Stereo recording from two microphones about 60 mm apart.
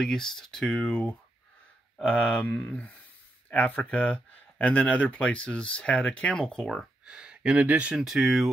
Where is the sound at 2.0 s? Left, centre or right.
Left.